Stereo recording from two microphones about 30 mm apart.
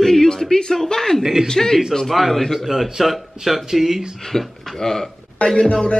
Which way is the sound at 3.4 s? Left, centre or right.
Right.